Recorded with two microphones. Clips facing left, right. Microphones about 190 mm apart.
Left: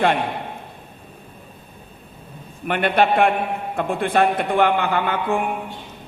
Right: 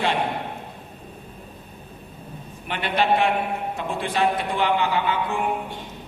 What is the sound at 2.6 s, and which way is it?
A man's voice, 55° left (ahead or behind).